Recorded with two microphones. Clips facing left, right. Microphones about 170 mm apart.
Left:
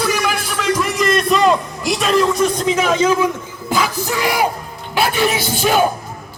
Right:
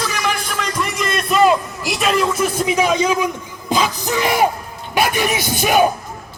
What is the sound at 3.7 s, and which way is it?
Music, 20° right (ahead or behind).